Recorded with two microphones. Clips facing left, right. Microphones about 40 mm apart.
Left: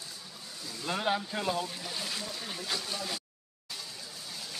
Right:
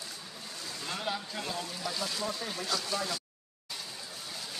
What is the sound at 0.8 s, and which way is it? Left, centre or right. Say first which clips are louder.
Speech: left 5 dB; left.